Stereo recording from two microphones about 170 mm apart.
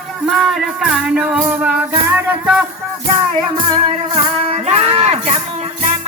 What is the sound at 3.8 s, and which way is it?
Music, 35° right (ahead or behind).